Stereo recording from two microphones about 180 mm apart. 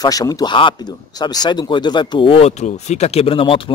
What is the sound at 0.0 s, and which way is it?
Speech, 20° left (ahead or behind).